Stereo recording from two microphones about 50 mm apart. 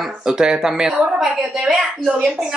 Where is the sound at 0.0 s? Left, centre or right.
Centre.